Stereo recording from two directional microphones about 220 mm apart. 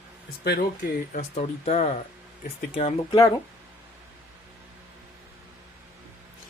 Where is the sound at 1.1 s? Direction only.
30° left (ahead or behind).